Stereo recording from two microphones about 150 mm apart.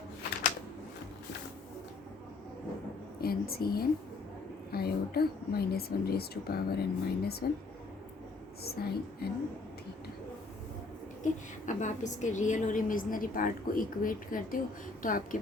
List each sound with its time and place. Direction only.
3.2 s a woman's voice: 90° left
8.6 s speech: 90° left
11.2 s a woman's voice: 55° left (ahead or behind)